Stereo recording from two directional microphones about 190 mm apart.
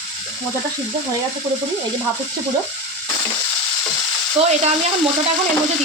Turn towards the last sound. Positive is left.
turn(degrees=-35)  # may be behind; listen again after turning